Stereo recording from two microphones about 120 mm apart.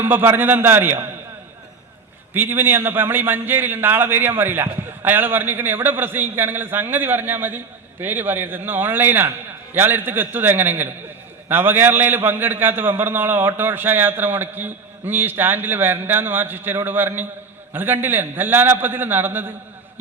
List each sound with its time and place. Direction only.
0.0 s a man's voice: 15° right (ahead or behind)
2.3 s a man's voice: 20° right (ahead or behind)